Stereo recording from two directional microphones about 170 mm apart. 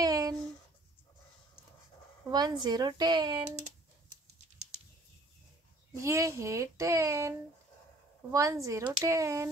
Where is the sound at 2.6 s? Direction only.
25° right (ahead or behind).